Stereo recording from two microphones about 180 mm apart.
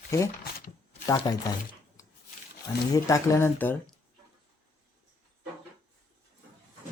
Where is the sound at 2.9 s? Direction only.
20° left (ahead or behind).